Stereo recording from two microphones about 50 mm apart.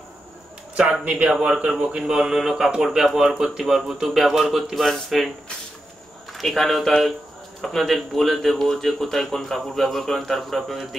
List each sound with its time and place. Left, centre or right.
1.0 s speech: right
1.3 s speech: centre
6.3 s speech: centre